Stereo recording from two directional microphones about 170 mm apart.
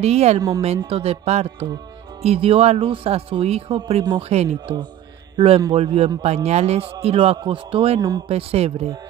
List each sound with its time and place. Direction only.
0.0 s a man's voice: 40° right (ahead or behind)